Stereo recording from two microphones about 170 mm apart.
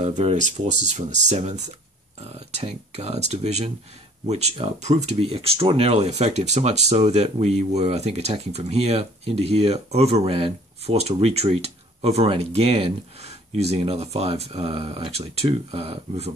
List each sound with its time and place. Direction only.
0.0 s speech: 40° right (ahead or behind)